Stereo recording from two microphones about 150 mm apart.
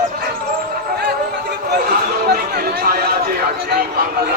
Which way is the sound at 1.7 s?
90° right.